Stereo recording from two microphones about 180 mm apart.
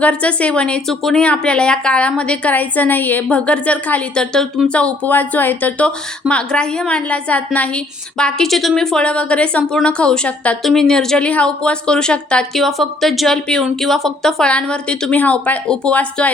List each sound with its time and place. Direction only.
0.0 s a woman's voice: 5° left (ahead or behind)